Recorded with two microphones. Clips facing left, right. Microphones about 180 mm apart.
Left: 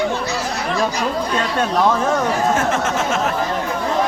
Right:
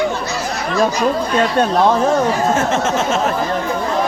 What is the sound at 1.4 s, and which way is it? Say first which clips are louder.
Speech: right 4 dB; 35° right (ahead or behind).